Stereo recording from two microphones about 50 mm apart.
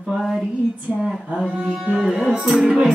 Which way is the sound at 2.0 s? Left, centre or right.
Centre.